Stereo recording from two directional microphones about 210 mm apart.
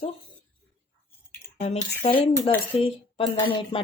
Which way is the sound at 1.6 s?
30° left (ahead or behind).